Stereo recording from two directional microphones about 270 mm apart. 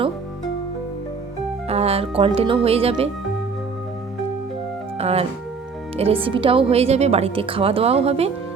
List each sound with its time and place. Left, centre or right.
1.6 s speech: right
4.9 s a woman's voice: right